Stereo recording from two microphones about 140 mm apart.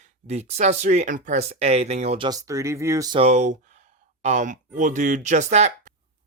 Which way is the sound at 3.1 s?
50° right (ahead or behind).